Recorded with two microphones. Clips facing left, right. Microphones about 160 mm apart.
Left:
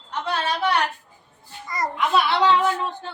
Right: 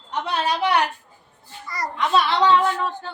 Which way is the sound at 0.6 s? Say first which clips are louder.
Right 2 dB; 20° right (ahead or behind).